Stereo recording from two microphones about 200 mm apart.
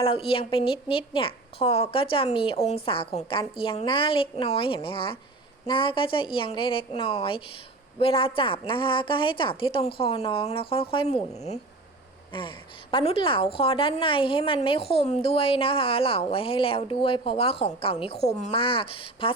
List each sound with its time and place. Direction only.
0.0 s a woman's voice: 30° left (ahead or behind)